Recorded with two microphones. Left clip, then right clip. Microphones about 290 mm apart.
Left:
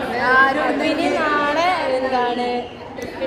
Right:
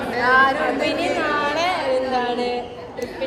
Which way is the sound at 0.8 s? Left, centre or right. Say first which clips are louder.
Left 2 dB; centre.